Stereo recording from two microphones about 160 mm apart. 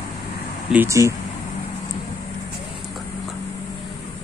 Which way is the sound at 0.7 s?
20° right (ahead or behind).